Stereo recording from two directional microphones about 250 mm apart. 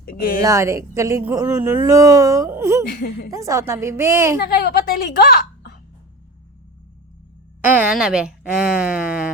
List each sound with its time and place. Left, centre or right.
0.0 s speech: left
0.4 s speech: centre
2.9 s speech: left
3.3 s speech: centre
4.4 s speech: left
5.2 s a sound: left
7.6 s a woman's voice: centre